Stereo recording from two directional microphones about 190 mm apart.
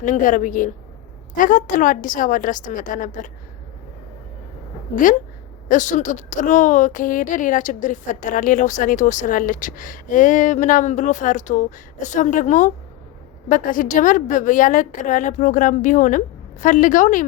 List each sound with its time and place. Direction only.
0.0 s a woman's voice: 40° left (ahead or behind)
5.6 s a woman's voice: 40° left (ahead or behind)